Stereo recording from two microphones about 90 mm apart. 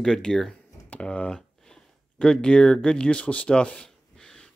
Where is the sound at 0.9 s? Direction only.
15° left (ahead or behind).